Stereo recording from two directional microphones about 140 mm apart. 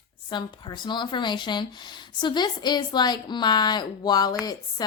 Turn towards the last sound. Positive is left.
turn(degrees=25)  # may be behind; listen again after turning